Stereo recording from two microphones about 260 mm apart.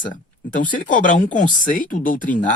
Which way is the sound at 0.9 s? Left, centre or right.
Left.